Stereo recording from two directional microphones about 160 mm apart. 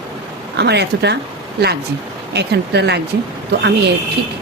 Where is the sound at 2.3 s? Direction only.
90° right.